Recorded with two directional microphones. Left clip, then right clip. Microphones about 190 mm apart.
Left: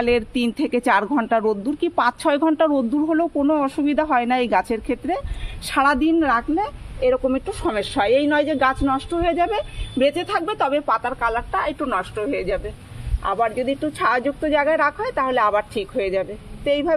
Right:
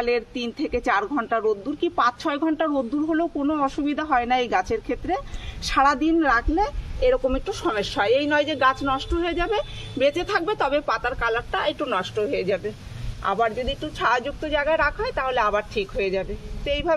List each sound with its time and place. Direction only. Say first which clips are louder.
0.0 s speech: left 4 dB; 45° left (ahead or behind); by 16.9 s 20° left (ahead or behind)